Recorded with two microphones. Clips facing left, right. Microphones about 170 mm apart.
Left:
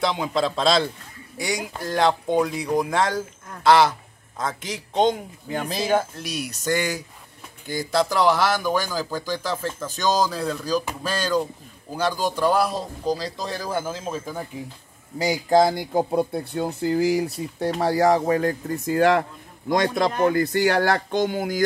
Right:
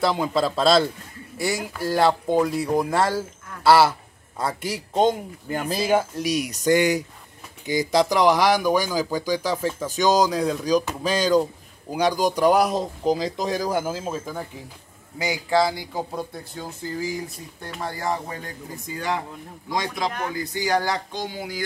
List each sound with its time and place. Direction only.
0.0 s speech: centre (ahead or behind)
15.1 s speech: 40° left (ahead or behind); by 16.6 s 60° left (ahead or behind)
16.8 s speech: 75° left (ahead or behind)
17.7 s speech: 85° left
18.5 s speech: 65° left (ahead or behind)
20.2 s speech: 60° left (ahead or behind)